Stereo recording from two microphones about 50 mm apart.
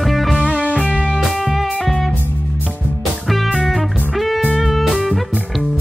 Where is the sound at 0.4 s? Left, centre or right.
Right.